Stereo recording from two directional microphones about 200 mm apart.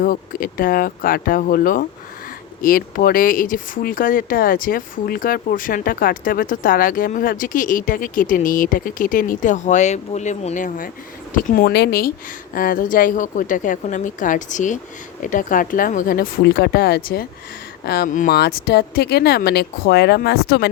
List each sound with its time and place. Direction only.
0.0 s a woman's voice: 45° left (ahead or behind)